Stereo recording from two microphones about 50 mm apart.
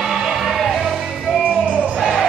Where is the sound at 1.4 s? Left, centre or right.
Right.